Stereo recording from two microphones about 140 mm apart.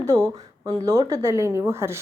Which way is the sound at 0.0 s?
20° right (ahead or behind).